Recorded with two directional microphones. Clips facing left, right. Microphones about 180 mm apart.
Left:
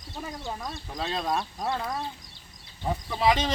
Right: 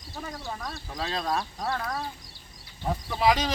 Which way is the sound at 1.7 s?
20° left (ahead or behind).